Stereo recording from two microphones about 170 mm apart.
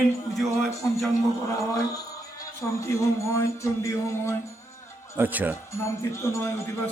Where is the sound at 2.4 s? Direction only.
15° left (ahead or behind).